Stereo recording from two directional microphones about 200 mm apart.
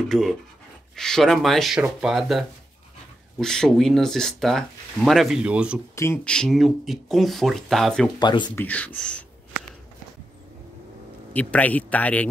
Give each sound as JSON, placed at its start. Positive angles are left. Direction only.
{"t": 0.1, "sound": "speech", "side_deg": 0}
{"t": 5.9, "sound": "speech", "side_deg": 10}
{"t": 8.2, "sound": "speech", "side_deg": 20}
{"t": 8.5, "sound": "speech", "side_deg": 5}
{"t": 11.3, "sound": "speech", "side_deg": 10}